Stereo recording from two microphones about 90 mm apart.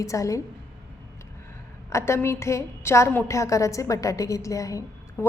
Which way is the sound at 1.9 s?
30° left (ahead or behind).